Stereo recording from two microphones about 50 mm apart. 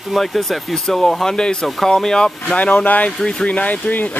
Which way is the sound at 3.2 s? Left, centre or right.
Centre.